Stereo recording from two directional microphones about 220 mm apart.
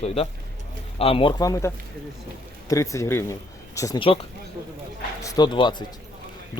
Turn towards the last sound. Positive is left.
turn(degrees=20)  # may be behind; listen again after turning